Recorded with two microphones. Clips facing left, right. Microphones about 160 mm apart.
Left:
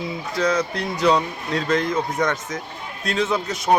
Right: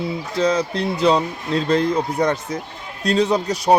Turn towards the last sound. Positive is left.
turn(degrees=-35)  # may be behind; listen again after turning